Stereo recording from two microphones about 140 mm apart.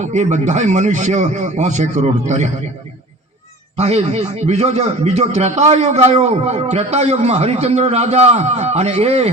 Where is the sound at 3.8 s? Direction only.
50° right (ahead or behind).